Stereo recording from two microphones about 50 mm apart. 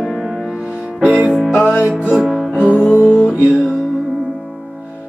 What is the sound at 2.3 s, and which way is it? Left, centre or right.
Music, right.